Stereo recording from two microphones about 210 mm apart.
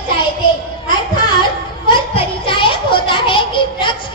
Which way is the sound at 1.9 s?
25° left (ahead or behind).